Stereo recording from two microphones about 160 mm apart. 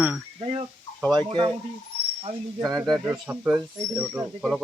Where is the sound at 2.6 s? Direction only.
25° right (ahead or behind).